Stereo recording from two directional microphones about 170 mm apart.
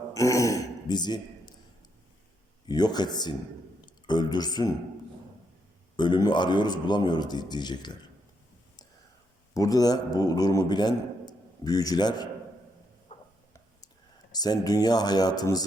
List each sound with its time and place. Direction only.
0.1 s speech: 20° left (ahead or behind)
2.6 s a man's voice: 25° left (ahead or behind)
6.0 s a man's voice: 25° left (ahead or behind)
9.6 s a man's voice: 20° left (ahead or behind)
13.1 s a sound: 40° left (ahead or behind)
14.3 s a man's voice: 25° left (ahead or behind)